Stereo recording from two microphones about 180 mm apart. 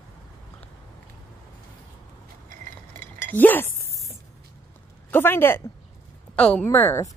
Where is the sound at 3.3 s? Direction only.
10° left (ahead or behind).